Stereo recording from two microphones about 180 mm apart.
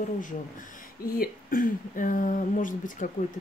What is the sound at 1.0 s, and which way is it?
Speech, 55° left (ahead or behind).